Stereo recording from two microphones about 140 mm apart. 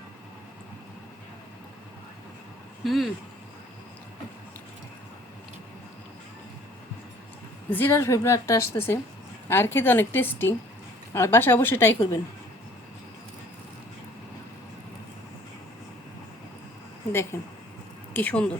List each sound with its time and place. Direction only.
2.8 s speech: centre (ahead or behind)
7.7 s a woman's voice: 15° left (ahead or behind)
17.3 s a woman's voice: 20° left (ahead or behind)